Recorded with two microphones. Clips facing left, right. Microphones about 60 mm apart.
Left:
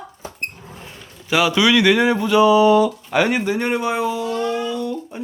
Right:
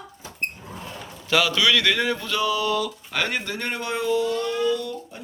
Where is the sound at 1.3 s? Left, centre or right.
Centre.